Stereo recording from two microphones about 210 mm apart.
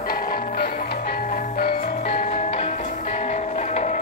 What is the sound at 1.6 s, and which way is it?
Music, 40° left (ahead or behind).